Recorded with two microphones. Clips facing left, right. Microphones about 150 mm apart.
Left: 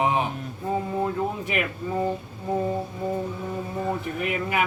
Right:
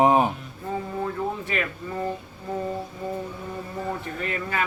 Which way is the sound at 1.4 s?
15° left (ahead or behind).